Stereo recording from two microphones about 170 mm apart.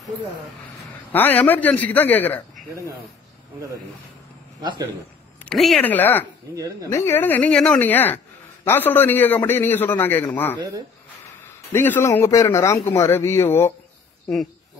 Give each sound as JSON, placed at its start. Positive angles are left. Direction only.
{"t": 1.1, "sound": "a man's voice", "side_deg": 10}
{"t": 4.6, "sound": "a man's voice", "side_deg": -25}
{"t": 5.4, "sound": "a man's voice", "side_deg": 5}
{"t": 6.5, "sound": "speech", "side_deg": -20}
{"t": 6.9, "sound": "a man's voice", "side_deg": 15}
{"t": 11.7, "sound": "a man's voice", "side_deg": 15}